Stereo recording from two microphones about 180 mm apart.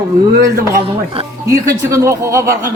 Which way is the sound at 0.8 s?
30° right (ahead or behind).